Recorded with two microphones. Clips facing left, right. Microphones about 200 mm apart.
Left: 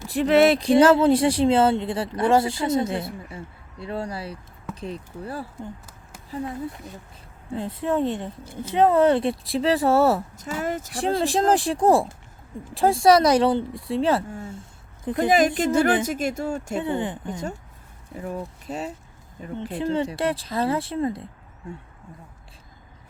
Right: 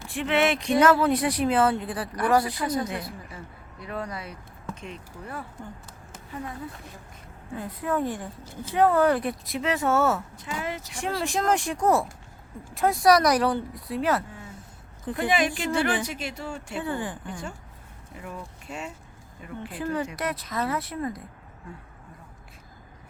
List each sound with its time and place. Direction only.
0.1 s speech: 40° left (ahead or behind)
7.5 s speech: 25° left (ahead or behind); by 10.9 s 50° left (ahead or behind)
11.2 s speech: 30° left (ahead or behind)
14.3 s a sound: 45° left (ahead or behind)
14.5 s a sound: 25° left (ahead or behind)
15.2 s speech: 40° left (ahead or behind)
16.8 s speech: 20° left (ahead or behind)
18.2 s speech: 40° left (ahead or behind)
19.7 s speech: 25° left (ahead or behind)